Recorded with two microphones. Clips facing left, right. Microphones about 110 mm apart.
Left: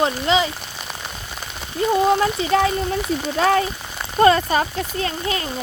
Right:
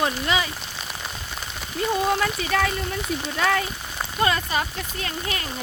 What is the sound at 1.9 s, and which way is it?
Speech, 25° left (ahead or behind).